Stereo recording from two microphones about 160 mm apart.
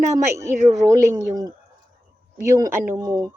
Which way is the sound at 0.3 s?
20° right (ahead or behind).